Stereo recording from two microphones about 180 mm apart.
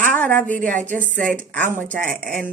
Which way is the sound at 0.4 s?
50° right (ahead or behind).